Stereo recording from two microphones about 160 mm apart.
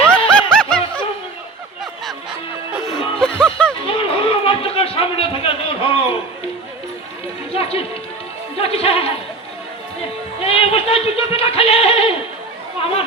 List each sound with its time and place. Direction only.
0.4 s snicker: 5° left (ahead or behind)
2.7 s music: centre (ahead or behind)
3.8 s a sound: 35° left (ahead or behind)
7.5 s music: 40° left (ahead or behind)
10.4 s goat: 35° left (ahead or behind)
12.8 s chatter: 35° left (ahead or behind)